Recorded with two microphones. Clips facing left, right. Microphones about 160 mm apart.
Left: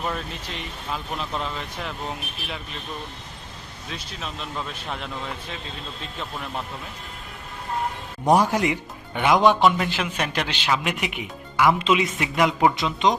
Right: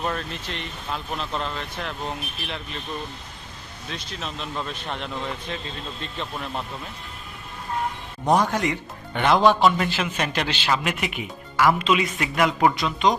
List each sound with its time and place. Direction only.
0.0 s speech: centre (ahead or behind)
3.8 s speech: 5° left (ahead or behind)
8.2 s a man's voice: 10° left (ahead or behind)
9.7 s a man's voice: centre (ahead or behind); by 13.1 s 20° left (ahead or behind)